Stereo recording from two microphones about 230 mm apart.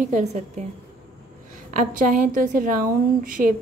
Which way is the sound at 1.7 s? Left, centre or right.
Right.